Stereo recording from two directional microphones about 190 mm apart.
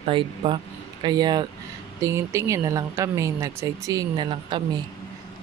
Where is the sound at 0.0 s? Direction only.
30° right (ahead or behind).